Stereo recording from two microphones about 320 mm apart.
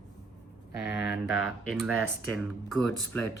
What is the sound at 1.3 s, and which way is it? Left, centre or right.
Speech, centre.